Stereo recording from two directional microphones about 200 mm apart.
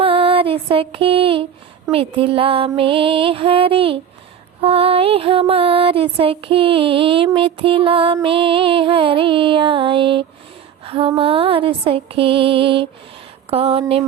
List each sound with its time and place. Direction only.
0.0 s mantra: 25° right (ahead or behind)
1.9 s female singing: 25° right (ahead or behind)